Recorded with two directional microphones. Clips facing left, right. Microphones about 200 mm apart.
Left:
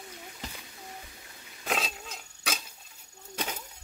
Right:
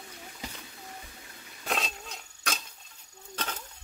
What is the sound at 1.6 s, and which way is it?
Dog, centre (ahead or behind).